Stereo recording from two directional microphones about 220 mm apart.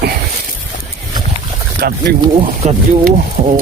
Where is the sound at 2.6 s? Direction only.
35° right (ahead or behind).